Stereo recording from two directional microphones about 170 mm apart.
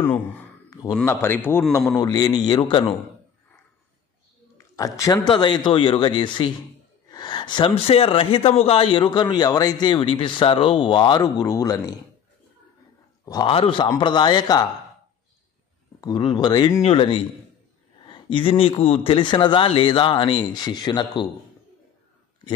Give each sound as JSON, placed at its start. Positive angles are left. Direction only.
{"t": 1.0, "sound": "speech", "side_deg": 15}
{"t": 4.6, "sound": "speech", "side_deg": 20}
{"t": 13.2, "sound": "a man's voice", "side_deg": 20}
{"t": 16.0, "sound": "speech", "side_deg": 25}